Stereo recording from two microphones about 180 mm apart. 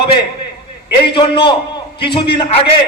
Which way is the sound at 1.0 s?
25° left (ahead or behind).